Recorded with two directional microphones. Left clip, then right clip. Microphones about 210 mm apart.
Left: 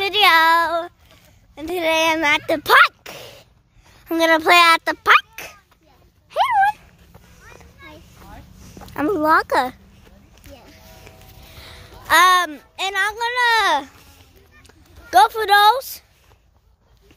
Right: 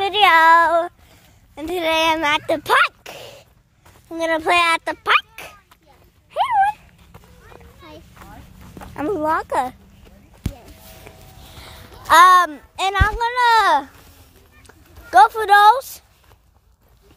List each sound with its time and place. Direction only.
0.0 s child singing: 10° left (ahead or behind)
1.5 s a sound: 10° right (ahead or behind)
1.8 s speech: centre (ahead or behind); by 2.9 s 20° left (ahead or behind)
3.0 s a sound: 10° left (ahead or behind)
4.2 s speech: 25° left (ahead or behind)
6.3 s a sound: 25° left (ahead or behind)
8.9 s speech: 30° left (ahead or behind)
12.1 s speech: centre (ahead or behind)
12.7 s speech: 20° right (ahead or behind)
13.4 s speech: 10° right (ahead or behind)
15.0 s speech: 10° left (ahead or behind)